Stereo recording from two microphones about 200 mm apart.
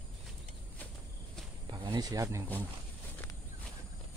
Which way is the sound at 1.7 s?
20° right (ahead or behind).